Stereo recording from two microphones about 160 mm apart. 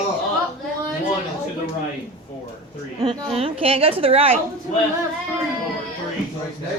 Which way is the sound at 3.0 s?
35° right (ahead or behind).